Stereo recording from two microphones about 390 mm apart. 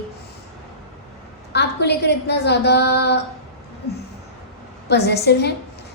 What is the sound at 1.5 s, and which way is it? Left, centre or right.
A woman's voice, left.